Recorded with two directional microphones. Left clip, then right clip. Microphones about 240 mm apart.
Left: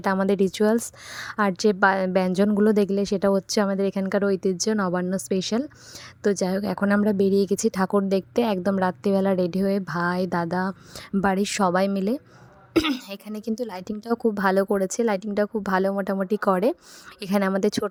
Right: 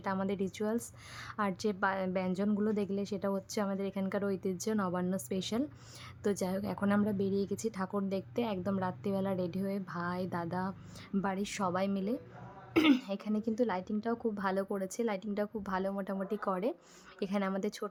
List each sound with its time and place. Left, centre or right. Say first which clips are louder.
0.0 s a woman's voice: left 13 dB; left
12.7 s speech: left 5 dB; left
13.1 s a woman's voice: left 4 dB; left